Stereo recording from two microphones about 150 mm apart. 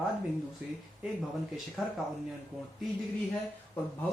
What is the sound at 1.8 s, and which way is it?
Speech, 5° right (ahead or behind).